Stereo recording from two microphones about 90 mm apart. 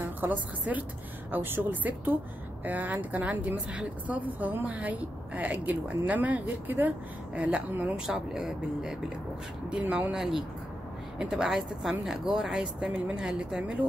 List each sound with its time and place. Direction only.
0.0 s a woman's voice: 20° right (ahead or behind)